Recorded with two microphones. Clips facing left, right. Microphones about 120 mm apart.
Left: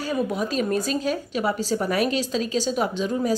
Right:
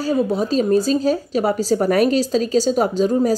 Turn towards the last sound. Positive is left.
turn(degrees=-40)  # may be behind; listen again after turning